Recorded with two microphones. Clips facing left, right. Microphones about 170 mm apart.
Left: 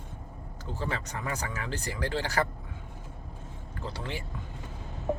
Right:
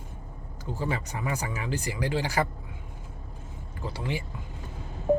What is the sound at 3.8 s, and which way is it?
Speech, 10° right (ahead or behind).